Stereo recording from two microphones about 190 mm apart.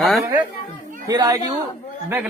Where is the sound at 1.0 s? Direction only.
20° right (ahead or behind).